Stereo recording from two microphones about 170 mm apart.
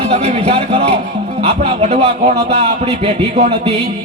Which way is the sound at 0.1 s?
40° right (ahead or behind).